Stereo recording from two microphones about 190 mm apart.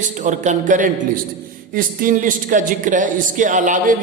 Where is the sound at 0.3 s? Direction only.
40° right (ahead or behind).